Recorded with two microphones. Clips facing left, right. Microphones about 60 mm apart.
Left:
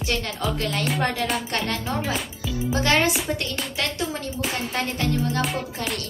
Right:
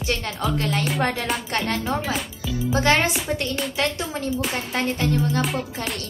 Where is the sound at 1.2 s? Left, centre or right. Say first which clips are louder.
Even; centre.